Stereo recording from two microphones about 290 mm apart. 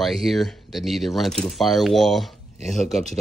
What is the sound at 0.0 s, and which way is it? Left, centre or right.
Speech, centre.